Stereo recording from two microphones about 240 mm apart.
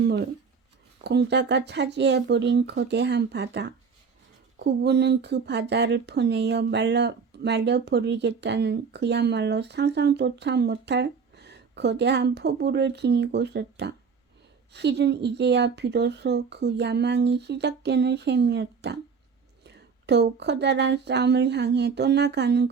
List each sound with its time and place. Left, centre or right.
1.0 s speech: right